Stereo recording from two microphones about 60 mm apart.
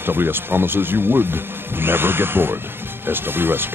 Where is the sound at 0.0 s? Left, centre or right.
Right.